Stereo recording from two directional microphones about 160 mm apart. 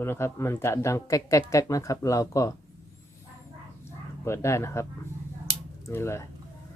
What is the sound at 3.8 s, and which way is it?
Speech, 15° left (ahead or behind).